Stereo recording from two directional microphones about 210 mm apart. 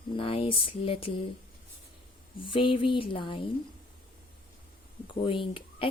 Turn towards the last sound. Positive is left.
turn(degrees=25)  # may be behind; listen again after turning